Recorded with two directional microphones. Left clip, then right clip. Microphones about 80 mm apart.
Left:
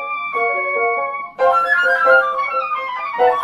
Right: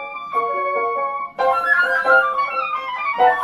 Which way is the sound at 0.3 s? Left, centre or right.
Centre.